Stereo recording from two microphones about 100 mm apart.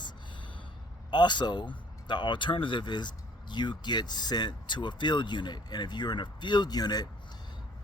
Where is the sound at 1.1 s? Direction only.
50° left (ahead or behind).